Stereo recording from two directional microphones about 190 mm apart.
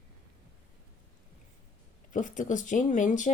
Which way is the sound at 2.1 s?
45° left (ahead or behind).